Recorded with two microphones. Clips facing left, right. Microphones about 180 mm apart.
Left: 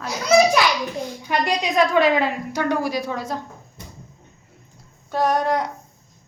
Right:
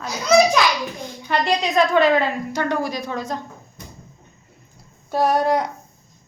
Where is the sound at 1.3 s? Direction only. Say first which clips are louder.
Right 2 dB; 10° left (ahead or behind).